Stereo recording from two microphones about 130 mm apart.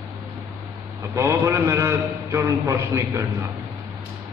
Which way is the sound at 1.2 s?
25° right (ahead or behind).